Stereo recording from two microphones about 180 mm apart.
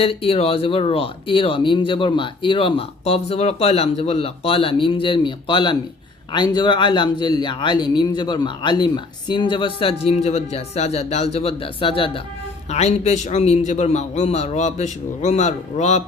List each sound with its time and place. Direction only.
0.0 s speech: 30° left (ahead or behind)